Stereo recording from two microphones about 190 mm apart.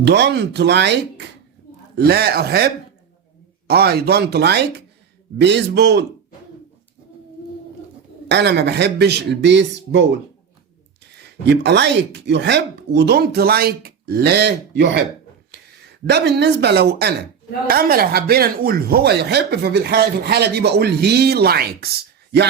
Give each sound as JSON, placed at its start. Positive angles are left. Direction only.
{"t": 0.0, "sound": "speech", "side_deg": -65}
{"t": 8.3, "sound": "speech", "side_deg": -65}
{"t": 11.2, "sound": "speech", "side_deg": -60}